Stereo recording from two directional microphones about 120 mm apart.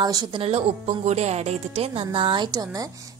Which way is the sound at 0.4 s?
55° right (ahead or behind).